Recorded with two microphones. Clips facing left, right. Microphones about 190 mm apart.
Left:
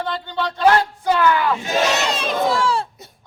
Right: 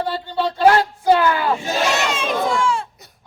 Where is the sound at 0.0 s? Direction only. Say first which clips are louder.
Right 2 dB; 30° right (ahead or behind).